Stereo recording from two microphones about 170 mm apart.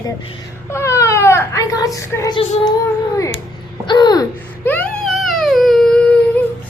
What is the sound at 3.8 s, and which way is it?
Babbling, 25° left (ahead or behind).